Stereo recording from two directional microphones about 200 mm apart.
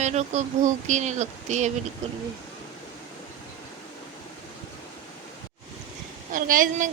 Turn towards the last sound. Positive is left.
turn(degrees=-40)  # may be behind; listen again after turning